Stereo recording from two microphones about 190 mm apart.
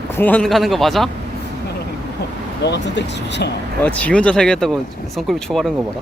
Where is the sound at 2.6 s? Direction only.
65° left (ahead or behind).